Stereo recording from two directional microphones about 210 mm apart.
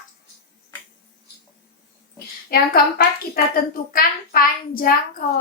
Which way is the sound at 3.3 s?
40° left (ahead or behind).